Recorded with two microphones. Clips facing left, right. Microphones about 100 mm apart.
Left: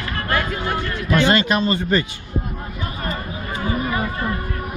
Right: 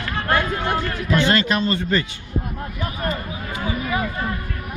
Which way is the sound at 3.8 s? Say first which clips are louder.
Left 1 dB; 40° left (ahead or behind).